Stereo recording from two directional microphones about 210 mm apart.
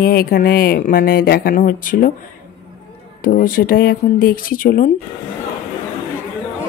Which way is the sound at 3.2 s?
40° left (ahead or behind).